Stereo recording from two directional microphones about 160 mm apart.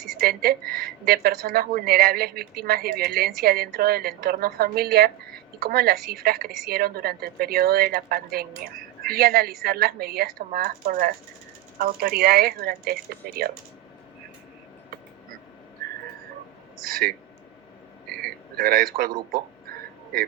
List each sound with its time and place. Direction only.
0.2 s a woman's voice: 70° right (ahead or behind)
16.8 s a woman's voice: 70° right (ahead or behind)